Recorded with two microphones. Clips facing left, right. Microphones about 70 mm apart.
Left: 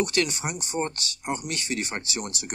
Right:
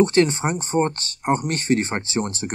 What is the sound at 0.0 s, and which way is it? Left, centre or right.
Speech, right.